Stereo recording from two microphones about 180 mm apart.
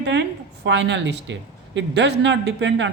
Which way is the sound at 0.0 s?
75° right (ahead or behind).